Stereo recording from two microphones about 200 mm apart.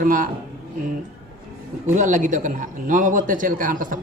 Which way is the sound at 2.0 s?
40° right (ahead or behind).